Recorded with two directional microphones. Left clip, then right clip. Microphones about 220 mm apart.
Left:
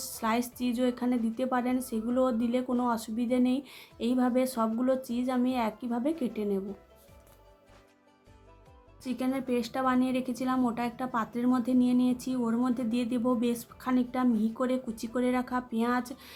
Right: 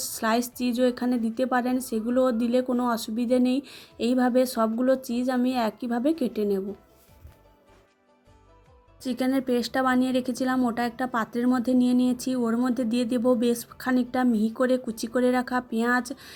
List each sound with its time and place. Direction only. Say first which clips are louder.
0.0 s speech: right 5 dB; 20° right (ahead or behind)
9.0 s speech: right 6 dB; 25° right (ahead or behind)